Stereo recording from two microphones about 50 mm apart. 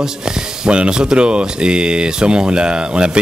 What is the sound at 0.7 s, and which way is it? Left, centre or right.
Speech, centre.